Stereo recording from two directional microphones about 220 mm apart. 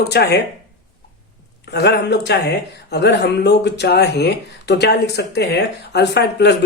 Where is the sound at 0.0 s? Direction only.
50° left (ahead or behind).